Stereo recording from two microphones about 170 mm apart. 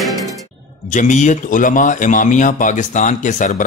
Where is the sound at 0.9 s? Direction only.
45° left (ahead or behind).